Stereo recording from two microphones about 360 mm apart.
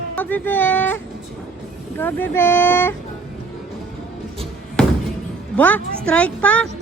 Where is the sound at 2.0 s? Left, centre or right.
Centre.